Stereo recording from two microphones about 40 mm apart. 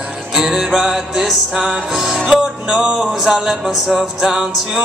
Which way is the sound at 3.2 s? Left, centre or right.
Centre.